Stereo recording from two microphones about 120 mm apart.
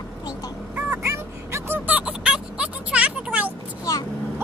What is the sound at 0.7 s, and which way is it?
Fowl, 20° right (ahead or behind).